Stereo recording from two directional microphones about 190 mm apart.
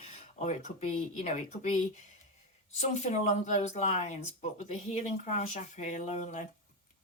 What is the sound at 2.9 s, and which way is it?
Speech, 40° left (ahead or behind).